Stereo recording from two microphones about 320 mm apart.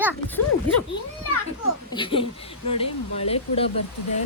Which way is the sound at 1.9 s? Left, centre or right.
Centre.